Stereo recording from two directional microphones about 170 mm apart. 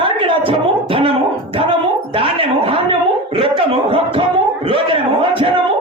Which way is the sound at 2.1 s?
35° right (ahead or behind).